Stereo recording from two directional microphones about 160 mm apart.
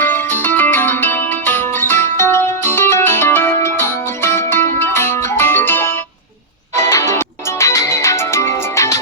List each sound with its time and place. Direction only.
0.0 s music: 10° left (ahead or behind)
6.9 s music: 15° left (ahead or behind)